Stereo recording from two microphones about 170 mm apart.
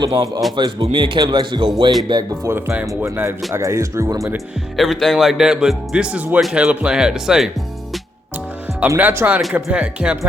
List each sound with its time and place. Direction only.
0.0 s speech: 25° right (ahead or behind)
2.5 s speech: 10° right (ahead or behind)
4.8 s speech: centre (ahead or behind)
8.8 s speech: 10° right (ahead or behind)